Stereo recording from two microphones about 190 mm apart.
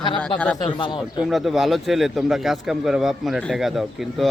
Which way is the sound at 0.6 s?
25° left (ahead or behind).